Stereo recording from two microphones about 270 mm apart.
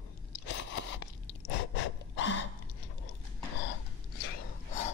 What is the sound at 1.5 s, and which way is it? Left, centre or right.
Gasp, left.